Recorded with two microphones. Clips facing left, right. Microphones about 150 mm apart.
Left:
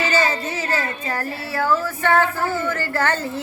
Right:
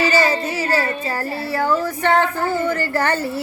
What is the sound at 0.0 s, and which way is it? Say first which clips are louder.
Speech: right 3 dB; 10° right (ahead or behind).